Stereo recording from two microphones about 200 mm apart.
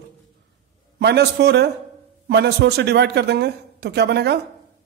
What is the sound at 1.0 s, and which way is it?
Speech, 55° right (ahead or behind).